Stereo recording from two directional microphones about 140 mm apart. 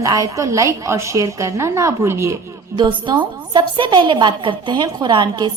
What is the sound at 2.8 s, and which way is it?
A woman's voice, 35° right (ahead or behind).